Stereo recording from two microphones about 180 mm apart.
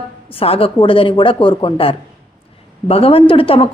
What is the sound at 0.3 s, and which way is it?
A woman's voice, 30° left (ahead or behind).